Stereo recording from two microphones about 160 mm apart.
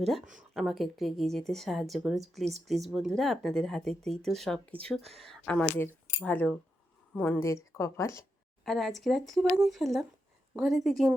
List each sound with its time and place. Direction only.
0.0 s a woman's voice: centre (ahead or behind); by 8.2 s 20° left (ahead or behind)
8.6 s a woman's voice: centre (ahead or behind)